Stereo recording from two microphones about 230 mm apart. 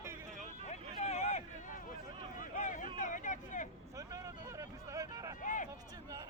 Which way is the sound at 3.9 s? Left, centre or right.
Centre.